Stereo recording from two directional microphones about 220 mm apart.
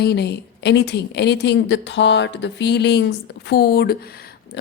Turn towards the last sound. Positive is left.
turn(degrees=45)  # may be behind; listen again after turning